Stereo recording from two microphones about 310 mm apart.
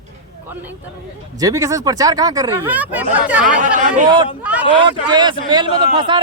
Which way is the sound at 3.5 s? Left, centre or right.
Right.